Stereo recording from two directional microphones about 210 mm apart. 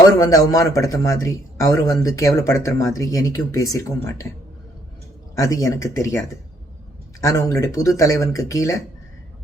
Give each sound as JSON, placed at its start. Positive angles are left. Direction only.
{"t": 0.2, "sound": "a man's voice", "side_deg": 15}
{"t": 5.3, "sound": "a man's voice", "side_deg": 15}